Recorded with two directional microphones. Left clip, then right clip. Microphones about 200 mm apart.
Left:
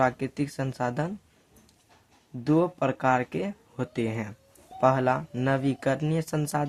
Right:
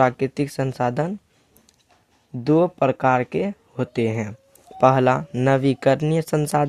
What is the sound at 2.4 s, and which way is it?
Speech, 35° right (ahead or behind).